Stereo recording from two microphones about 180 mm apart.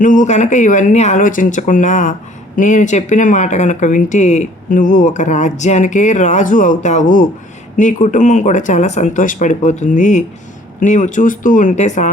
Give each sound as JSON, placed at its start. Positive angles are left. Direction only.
{"t": 0.0, "sound": "speech", "side_deg": 45}